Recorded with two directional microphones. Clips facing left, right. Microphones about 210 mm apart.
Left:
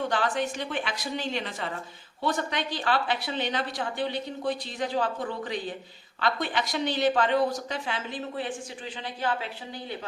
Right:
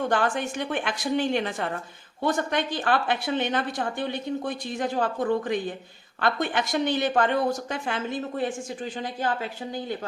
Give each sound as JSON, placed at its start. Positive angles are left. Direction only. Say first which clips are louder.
{"t": 0.1, "sound": "a woman's voice", "louder": "right 2 dB", "side_deg": -50}